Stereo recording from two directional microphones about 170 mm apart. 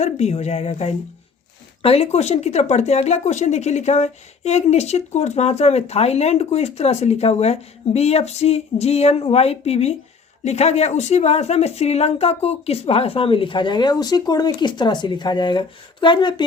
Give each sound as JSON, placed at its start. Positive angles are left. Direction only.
{"t": 0.0, "sound": "speech", "side_deg": 40}